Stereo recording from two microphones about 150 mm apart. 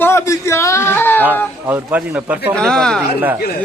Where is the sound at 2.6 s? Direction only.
5° left (ahead or behind).